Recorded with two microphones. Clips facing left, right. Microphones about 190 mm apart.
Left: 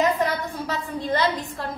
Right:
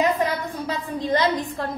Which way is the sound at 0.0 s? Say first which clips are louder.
Even; 15° right (ahead or behind).